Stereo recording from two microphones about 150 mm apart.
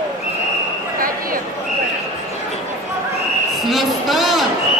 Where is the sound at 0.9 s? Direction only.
70° right (ahead or behind).